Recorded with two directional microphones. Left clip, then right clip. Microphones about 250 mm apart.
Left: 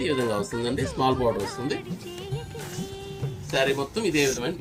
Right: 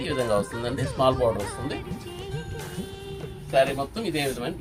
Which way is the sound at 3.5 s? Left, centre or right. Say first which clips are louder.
Right 2 dB; right.